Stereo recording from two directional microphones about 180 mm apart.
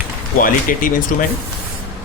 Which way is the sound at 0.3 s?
50° left (ahead or behind).